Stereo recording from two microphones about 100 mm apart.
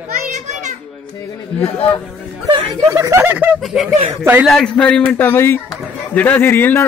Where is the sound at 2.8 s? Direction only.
30° right (ahead or behind).